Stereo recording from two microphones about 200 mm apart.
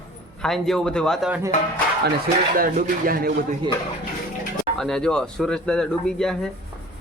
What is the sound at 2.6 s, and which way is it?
Speech, 45° right (ahead or behind).